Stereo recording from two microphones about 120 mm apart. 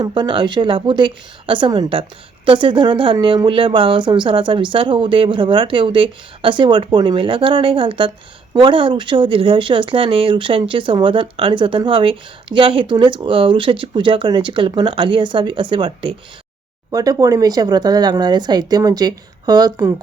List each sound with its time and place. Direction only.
0.0 s speech: 40° right (ahead or behind)
16.9 s speech: 30° right (ahead or behind)